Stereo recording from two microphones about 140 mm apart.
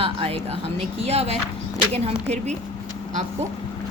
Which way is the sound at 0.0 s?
45° right (ahead or behind).